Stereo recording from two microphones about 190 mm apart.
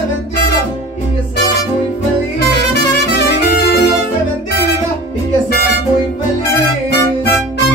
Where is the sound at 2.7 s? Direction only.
55° left (ahead or behind).